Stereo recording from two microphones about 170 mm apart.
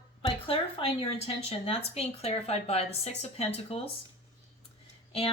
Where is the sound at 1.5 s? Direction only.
35° left (ahead or behind).